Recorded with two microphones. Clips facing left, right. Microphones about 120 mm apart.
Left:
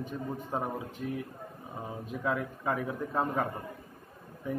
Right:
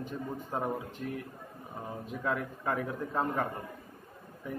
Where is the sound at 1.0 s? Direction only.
10° left (ahead or behind).